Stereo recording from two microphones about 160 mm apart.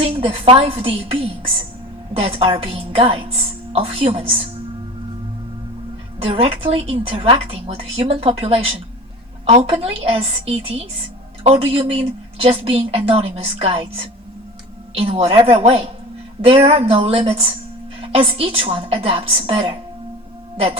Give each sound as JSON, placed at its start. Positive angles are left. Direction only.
{"t": 0.0, "sound": "a woman's voice", "side_deg": -40}
{"t": 6.1, "sound": "a woman's voice", "side_deg": -40}
{"t": 14.9, "sound": "a woman's voice", "side_deg": -40}